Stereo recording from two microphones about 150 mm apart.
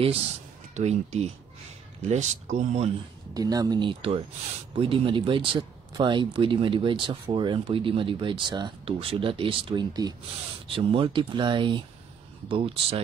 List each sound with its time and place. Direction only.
0.7 s speech: 45° right (ahead or behind)
3.3 s speech: 25° right (ahead or behind)